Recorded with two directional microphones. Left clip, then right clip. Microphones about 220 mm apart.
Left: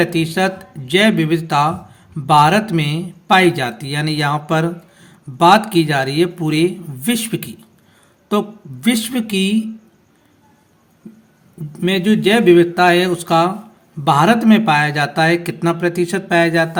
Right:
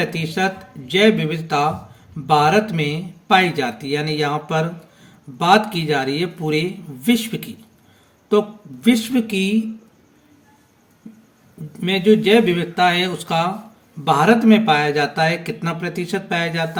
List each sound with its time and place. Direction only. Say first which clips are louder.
0.0 s speech: left 4 dB; 50° left (ahead or behind)
11.8 s speech: right 1 dB; 50° left (ahead or behind)